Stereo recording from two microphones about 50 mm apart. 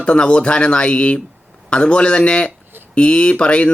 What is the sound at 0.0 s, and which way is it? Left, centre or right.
Speech, left.